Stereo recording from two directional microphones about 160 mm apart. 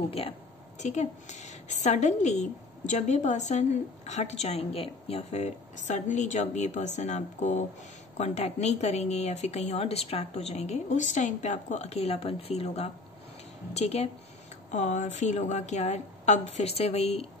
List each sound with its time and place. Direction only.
0.2 s a woman's voice: 40° left (ahead or behind)